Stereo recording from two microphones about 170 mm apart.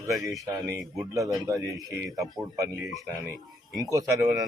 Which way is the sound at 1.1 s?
20° right (ahead or behind).